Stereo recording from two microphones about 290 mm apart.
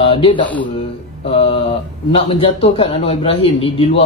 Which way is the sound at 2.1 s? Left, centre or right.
Centre.